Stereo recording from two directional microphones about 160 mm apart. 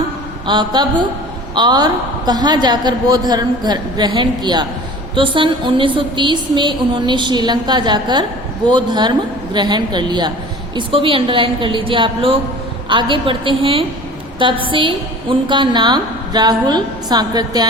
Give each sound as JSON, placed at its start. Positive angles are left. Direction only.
{"t": 0.4, "sound": "a woman's voice", "side_deg": -30}